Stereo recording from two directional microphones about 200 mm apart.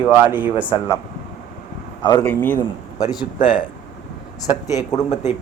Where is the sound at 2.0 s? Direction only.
20° left (ahead or behind).